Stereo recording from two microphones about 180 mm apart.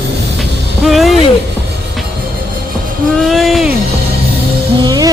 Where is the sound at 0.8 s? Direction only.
Centre (ahead or behind).